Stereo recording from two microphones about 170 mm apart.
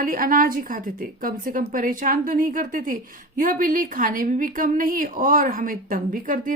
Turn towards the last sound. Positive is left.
turn(degrees=-55)  # may be behind; listen again after turning